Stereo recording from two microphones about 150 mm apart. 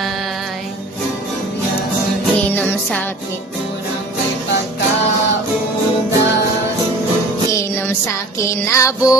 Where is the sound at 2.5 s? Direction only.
10° left (ahead or behind).